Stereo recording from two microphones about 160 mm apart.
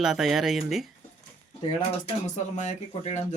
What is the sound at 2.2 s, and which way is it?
Speech, 45° left (ahead or behind).